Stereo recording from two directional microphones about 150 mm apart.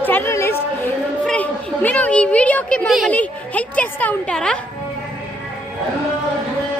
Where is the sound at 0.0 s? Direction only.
10° left (ahead or behind).